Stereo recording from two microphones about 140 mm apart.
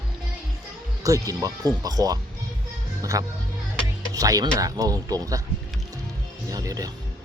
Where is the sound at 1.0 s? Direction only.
25° right (ahead or behind).